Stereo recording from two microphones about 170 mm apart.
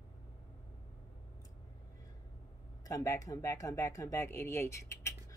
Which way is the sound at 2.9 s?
20° left (ahead or behind).